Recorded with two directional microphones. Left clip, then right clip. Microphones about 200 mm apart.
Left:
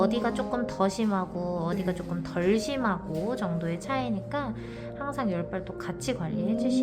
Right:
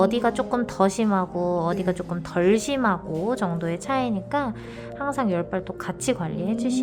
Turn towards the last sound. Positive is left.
turn(degrees=-30)  # may be behind; listen again after turning